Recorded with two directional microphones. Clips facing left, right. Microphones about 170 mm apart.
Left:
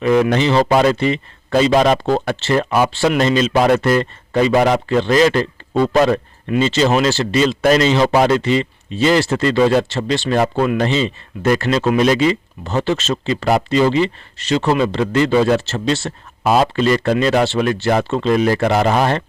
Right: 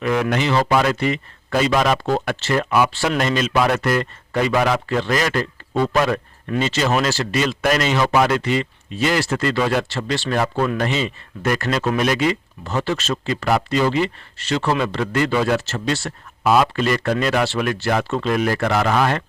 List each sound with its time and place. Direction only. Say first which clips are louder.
0.0 s speech: left 6 dB; 25° left (ahead or behind)